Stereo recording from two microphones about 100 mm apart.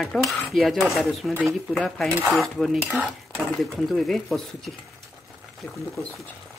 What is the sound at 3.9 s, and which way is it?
Cutlery, centre (ahead or behind).